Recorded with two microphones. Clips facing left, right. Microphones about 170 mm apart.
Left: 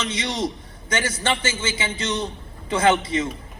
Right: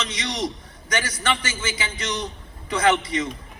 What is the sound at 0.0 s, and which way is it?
A man's voice, 25° left (ahead or behind).